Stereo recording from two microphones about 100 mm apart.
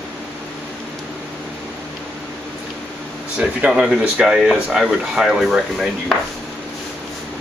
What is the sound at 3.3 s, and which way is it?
Speech, 10° right (ahead or behind).